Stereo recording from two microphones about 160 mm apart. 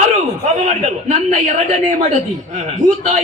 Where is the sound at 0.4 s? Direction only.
45° right (ahead or behind).